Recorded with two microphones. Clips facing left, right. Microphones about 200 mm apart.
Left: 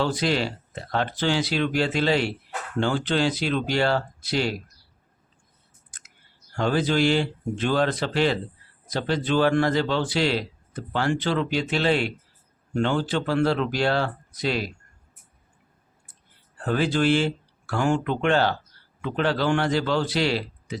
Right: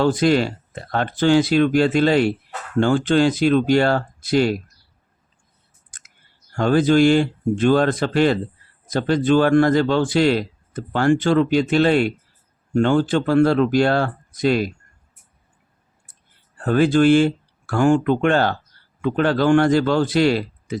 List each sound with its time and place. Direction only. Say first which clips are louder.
0.0 s a man's voice: right 7 dB; 50° right (ahead or behind)
5.9 s clicking: right 2 dB; 50° right (ahead or behind)
6.5 s a man's voice: right 7 dB; 50° right (ahead or behind)
16.6 s a man's voice: right 7 dB; 50° right (ahead or behind)